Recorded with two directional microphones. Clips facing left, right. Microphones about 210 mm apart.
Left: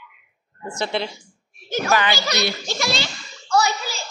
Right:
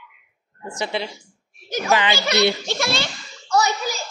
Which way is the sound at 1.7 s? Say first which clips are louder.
Even; 20° right (ahead or behind).